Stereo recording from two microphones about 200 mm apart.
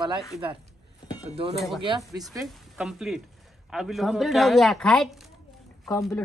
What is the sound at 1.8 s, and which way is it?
Speech, 20° right (ahead or behind).